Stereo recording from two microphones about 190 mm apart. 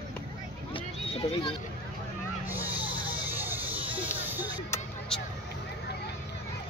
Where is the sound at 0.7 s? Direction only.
25° left (ahead or behind).